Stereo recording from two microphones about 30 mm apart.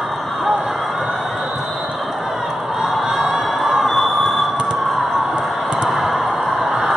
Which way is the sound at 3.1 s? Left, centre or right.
Centre.